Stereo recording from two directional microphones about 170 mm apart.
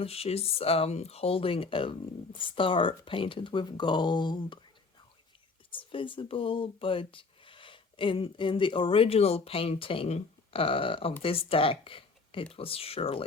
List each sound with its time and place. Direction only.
0.0 s speech: 35° left (ahead or behind)
5.7 s speech: 30° left (ahead or behind)